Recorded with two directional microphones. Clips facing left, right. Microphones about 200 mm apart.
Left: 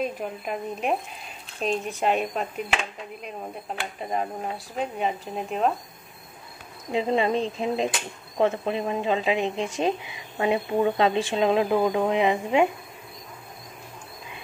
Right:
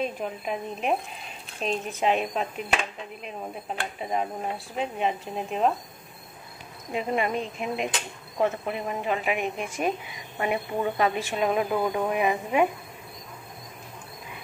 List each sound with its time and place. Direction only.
0.0 s speech: centre (ahead or behind)
6.9 s speech: 25° left (ahead or behind)